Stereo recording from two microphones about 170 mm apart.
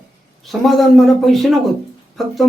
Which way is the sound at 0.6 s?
Centre (ahead or behind).